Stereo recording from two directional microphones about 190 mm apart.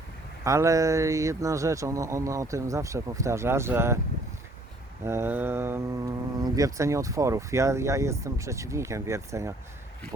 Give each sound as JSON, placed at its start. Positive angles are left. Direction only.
{"t": 0.4, "sound": "speech", "side_deg": -15}
{"t": 5.0, "sound": "speech", "side_deg": -15}